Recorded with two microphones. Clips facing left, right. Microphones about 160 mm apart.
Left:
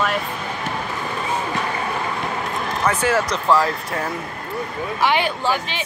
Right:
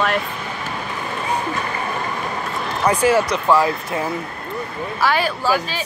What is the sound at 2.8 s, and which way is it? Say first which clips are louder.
Speech: right 3 dB; 15° right (ahead or behind).